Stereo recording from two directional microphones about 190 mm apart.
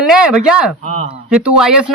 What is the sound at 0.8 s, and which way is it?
Speech, 40° right (ahead or behind).